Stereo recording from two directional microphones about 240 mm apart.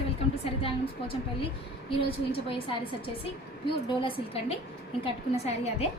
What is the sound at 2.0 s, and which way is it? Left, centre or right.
Speech, left.